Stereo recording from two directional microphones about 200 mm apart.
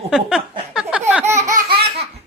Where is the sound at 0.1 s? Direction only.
Centre (ahead or behind).